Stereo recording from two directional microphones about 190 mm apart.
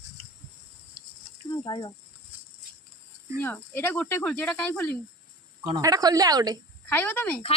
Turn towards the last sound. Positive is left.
turn(degrees=10)  # may be behind; listen again after turning